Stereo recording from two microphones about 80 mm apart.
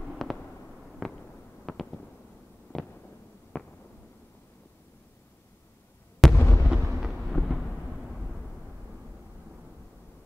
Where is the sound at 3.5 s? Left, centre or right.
Centre.